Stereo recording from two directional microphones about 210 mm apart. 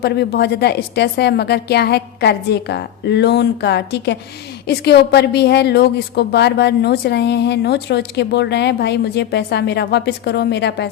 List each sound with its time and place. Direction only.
0.0 s a woman's voice: 50° left (ahead or behind)